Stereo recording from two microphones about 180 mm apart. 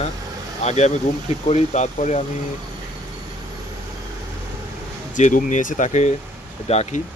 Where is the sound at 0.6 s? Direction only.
40° left (ahead or behind).